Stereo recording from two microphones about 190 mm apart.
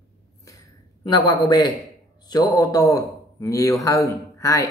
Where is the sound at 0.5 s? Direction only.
20° left (ahead or behind).